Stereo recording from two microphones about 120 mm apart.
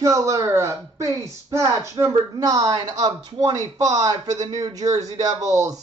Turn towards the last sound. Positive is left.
turn(degrees=-30)  # may be behind; listen again after turning